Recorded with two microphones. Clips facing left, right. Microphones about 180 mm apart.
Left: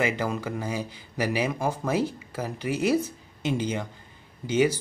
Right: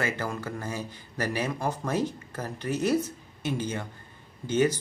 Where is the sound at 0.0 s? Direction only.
15° left (ahead or behind).